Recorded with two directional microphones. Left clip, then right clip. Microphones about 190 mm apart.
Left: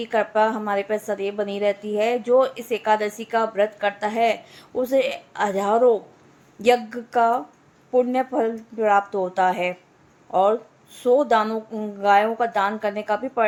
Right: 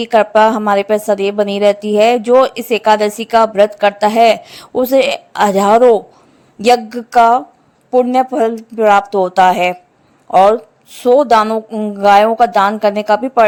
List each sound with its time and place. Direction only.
0.0 s a woman's voice: 55° right (ahead or behind)